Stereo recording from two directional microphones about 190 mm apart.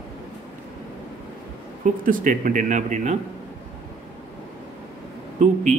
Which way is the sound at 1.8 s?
45° right (ahead or behind).